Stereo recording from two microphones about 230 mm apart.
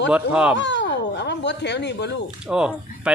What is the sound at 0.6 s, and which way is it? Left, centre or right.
Speech, left.